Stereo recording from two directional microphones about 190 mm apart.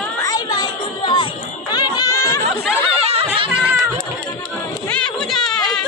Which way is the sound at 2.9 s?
35° right (ahead or behind).